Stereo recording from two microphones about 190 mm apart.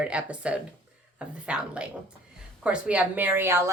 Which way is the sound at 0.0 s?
5° right (ahead or behind).